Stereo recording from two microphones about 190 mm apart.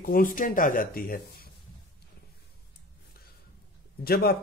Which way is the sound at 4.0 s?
55° left (ahead or behind).